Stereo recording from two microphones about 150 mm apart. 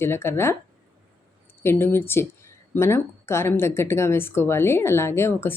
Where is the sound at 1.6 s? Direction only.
15° left (ahead or behind).